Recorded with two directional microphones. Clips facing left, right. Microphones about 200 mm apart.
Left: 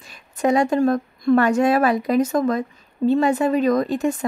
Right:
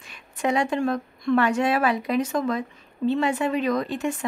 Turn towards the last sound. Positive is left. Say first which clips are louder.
# left 5 dB
turn(degrees=40)  # may be behind; listen again after turning